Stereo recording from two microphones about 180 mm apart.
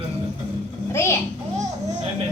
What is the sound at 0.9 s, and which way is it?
Speech, 15° left (ahead or behind).